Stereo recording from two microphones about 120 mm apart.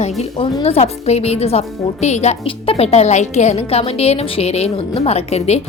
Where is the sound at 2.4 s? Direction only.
55° left (ahead or behind).